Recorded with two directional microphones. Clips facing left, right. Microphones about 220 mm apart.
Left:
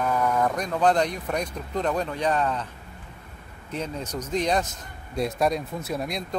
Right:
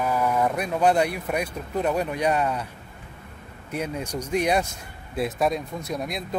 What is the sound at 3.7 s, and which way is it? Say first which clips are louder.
Speech: right 2 dB; 10° right (ahead or behind).